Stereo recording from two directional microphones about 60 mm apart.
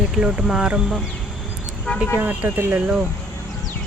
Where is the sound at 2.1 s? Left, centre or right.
Right.